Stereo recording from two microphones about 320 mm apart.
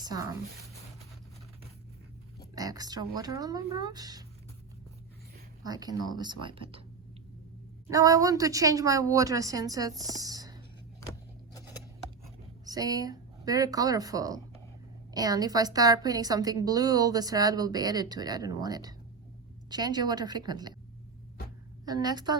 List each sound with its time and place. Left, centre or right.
0.0 s speech: centre
2.6 s a woman's voice: centre
5.6 s a woman's voice: centre
7.9 s a woman's voice: centre
12.6 s a woman's voice: centre
21.8 s a woman's voice: centre